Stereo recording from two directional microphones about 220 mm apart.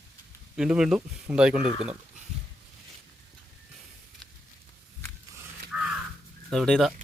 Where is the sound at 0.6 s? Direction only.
5° right (ahead or behind).